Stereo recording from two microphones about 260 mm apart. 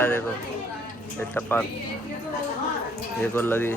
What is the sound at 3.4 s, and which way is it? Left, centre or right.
Speech, centre.